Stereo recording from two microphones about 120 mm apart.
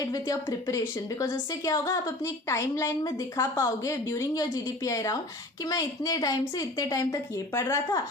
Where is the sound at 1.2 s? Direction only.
30° left (ahead or behind).